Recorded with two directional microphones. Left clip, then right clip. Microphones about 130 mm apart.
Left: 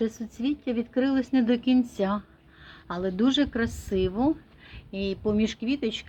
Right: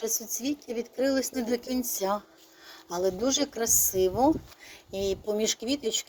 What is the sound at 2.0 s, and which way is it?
Speech, 25° right (ahead or behind).